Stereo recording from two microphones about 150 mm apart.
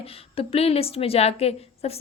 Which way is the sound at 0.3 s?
40° left (ahead or behind).